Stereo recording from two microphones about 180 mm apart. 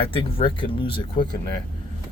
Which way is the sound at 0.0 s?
30° left (ahead or behind).